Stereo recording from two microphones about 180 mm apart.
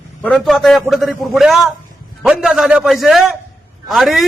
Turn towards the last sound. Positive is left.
turn(degrees=0)  # may be behind; listen again after turning